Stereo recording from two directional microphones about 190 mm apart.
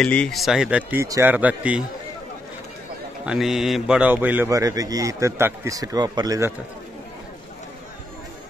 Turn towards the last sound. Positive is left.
turn(degrees=-15)  # may be behind; listen again after turning